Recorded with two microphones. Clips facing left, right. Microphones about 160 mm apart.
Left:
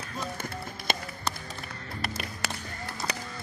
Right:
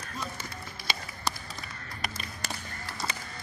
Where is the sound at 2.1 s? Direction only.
55° left (ahead or behind).